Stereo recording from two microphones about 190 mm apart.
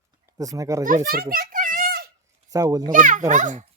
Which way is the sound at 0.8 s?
45° right (ahead or behind).